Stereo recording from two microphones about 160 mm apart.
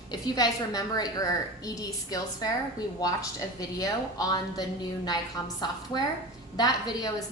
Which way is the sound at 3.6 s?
20° left (ahead or behind).